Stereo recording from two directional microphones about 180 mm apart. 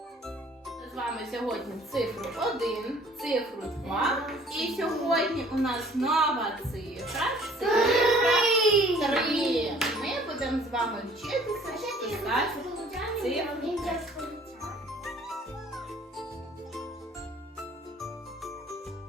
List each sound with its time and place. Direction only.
0.9 s speech: centre (ahead or behind)
12.9 s music: centre (ahead or behind)